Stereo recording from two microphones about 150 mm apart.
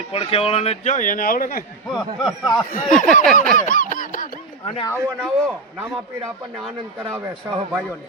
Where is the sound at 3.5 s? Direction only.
60° left (ahead or behind).